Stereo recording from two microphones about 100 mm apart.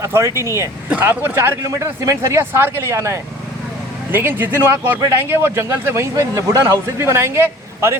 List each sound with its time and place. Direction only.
0.0 s speech: 30° right (ahead or behind)
0.9 s speech: 15° right (ahead or behind)